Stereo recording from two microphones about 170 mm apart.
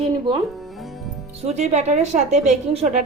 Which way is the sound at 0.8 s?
Centre (ahead or behind).